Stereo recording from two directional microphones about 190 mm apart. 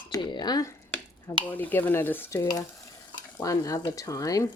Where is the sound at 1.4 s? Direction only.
10° left (ahead or behind).